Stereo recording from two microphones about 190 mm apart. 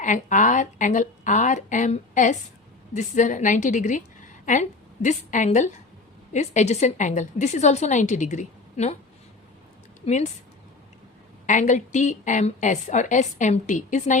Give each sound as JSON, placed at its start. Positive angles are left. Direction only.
{"t": 0.0, "sound": "a woman's voice", "side_deg": 40}
{"t": 10.0, "sound": "a woman's voice", "side_deg": 30}
{"t": 11.4, "sound": "a woman's voice", "side_deg": 40}